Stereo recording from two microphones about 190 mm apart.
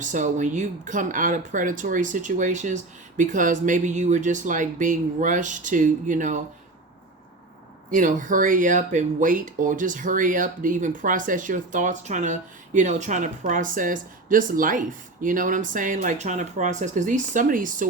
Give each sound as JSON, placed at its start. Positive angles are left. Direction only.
{"t": 0.0, "sound": "speech", "side_deg": -40}
{"t": 7.9, "sound": "speech", "side_deg": -45}